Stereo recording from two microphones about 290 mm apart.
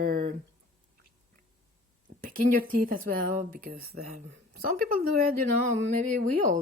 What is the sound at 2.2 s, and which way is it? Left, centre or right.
Speech, right.